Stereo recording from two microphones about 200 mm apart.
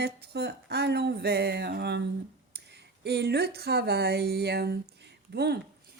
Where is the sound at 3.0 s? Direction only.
55° right (ahead or behind).